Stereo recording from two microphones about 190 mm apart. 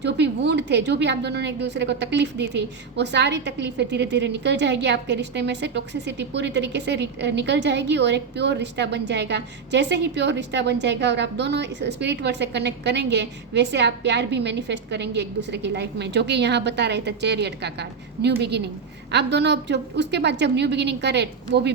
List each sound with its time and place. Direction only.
0.0 s a woman's voice: 65° right (ahead or behind)